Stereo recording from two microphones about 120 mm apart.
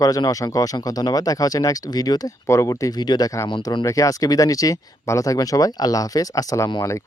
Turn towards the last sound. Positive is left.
turn(degrees=25)  # may be behind; listen again after turning